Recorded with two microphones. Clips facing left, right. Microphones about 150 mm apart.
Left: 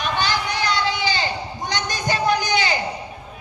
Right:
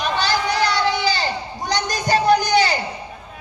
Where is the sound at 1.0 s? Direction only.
40° right (ahead or behind).